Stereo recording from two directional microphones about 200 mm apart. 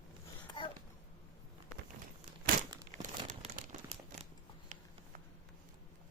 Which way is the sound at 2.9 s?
40° right (ahead or behind).